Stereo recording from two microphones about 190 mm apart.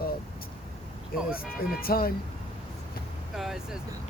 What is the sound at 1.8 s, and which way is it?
Speech, 50° left (ahead or behind).